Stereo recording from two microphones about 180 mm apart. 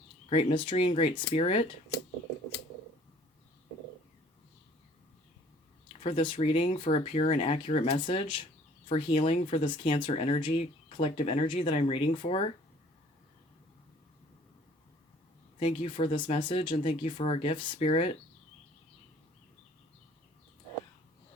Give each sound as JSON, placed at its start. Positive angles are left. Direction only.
{"t": 0.3, "sound": "speech", "side_deg": 30}
{"t": 6.0, "sound": "speech", "side_deg": 30}
{"t": 15.5, "sound": "speech", "side_deg": 35}